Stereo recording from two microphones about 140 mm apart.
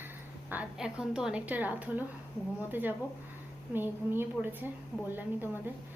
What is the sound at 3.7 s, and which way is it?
Speech, 15° right (ahead or behind).